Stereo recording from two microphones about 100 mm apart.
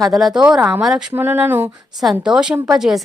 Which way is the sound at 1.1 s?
20° right (ahead or behind).